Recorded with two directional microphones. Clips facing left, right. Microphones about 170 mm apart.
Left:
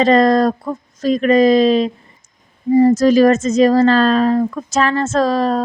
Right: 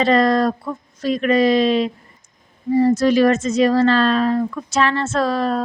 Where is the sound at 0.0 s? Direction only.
40° left (ahead or behind).